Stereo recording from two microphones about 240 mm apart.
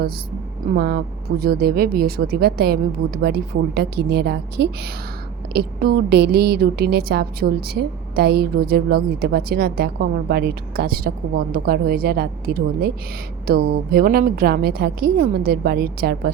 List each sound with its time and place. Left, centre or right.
0.7 s a woman's voice: right
3.8 s a woman's voice: right